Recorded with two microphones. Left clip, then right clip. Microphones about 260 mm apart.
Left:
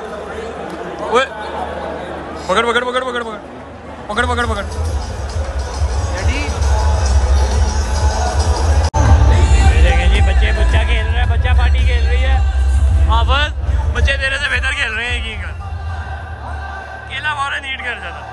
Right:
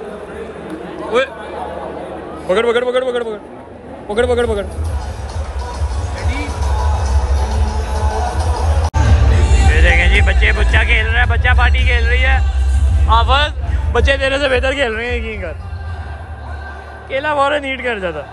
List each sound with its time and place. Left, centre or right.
1.1 s a man's voice: centre
2.5 s a man's voice: centre
7.3 s music: right
9.4 s speech: centre
13.9 s a man's voice: centre
17.1 s a man's voice: centre